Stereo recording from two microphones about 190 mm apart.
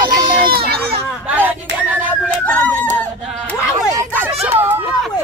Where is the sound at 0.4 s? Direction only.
55° right (ahead or behind).